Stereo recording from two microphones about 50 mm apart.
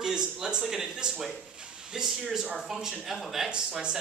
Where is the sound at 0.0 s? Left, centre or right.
Centre.